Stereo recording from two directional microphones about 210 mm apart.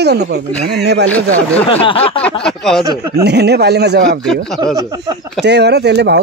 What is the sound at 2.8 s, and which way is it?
Speech, 15° right (ahead or behind).